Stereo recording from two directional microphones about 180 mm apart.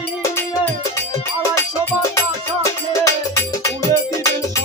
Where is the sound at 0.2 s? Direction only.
15° left (ahead or behind).